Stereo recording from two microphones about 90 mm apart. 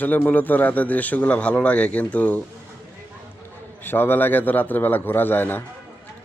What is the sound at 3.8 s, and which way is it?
A man's voice, 25° left (ahead or behind).